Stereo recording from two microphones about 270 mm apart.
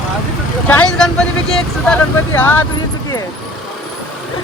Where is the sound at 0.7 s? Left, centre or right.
Centre.